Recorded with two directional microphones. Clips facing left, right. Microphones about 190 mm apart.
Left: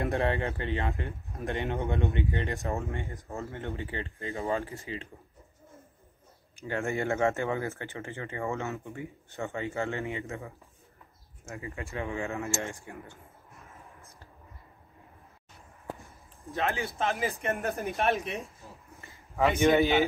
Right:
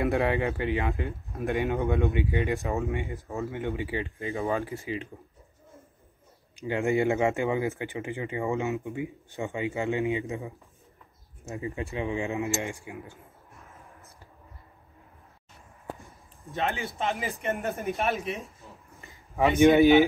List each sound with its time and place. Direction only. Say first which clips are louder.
0.0 s speech: right 3 dB; 10° right (ahead or behind)
6.5 s speech: right 6 dB; 15° right (ahead or behind)
16.4 s speech: even; centre (ahead or behind)
18.9 s a sound: right 2 dB; 15° right (ahead or behind)
19.8 s speech: right 7 dB; 15° right (ahead or behind)